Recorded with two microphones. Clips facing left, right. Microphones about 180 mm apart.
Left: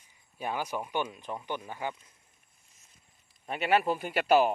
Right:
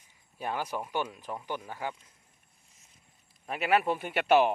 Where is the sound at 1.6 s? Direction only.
20° left (ahead or behind).